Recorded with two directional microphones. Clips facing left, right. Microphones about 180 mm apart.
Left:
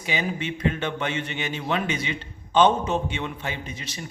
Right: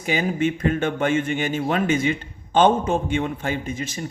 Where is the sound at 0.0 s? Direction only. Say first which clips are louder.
Right 6 dB; 45° right (ahead or behind).